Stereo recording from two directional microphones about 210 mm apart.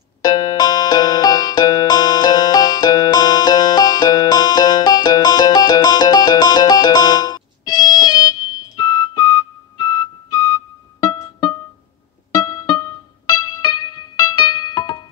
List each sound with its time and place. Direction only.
0.2 s music: 20° left (ahead or behind)